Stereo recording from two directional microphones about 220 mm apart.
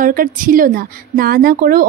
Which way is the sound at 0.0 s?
40° right (ahead or behind).